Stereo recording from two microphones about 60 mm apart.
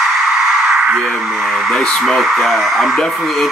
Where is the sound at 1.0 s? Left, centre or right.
Centre.